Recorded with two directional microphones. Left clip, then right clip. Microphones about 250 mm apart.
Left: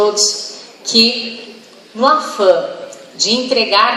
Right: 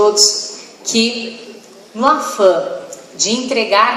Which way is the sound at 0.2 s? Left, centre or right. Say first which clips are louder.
Right 3 dB; right.